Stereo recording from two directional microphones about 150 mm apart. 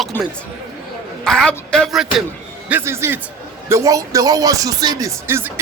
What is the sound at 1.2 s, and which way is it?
Music, 5° left (ahead or behind).